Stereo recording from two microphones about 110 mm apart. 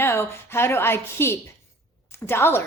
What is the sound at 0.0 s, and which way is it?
A woman's voice, 20° left (ahead or behind).